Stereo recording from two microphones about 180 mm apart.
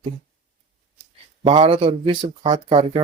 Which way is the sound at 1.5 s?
30° right (ahead or behind).